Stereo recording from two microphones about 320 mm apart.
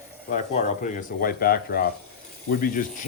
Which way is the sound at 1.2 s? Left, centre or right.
Left.